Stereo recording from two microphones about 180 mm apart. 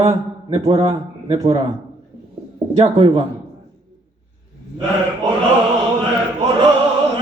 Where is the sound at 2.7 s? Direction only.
30° right (ahead or behind).